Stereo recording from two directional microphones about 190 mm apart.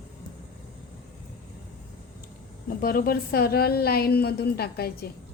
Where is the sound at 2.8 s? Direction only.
50° left (ahead or behind).